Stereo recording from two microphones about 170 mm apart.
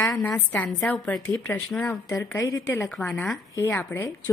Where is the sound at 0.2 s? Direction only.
10° left (ahead or behind).